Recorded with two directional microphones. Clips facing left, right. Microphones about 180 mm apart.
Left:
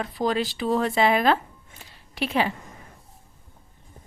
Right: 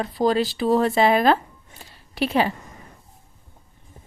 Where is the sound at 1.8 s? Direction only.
40° right (ahead or behind).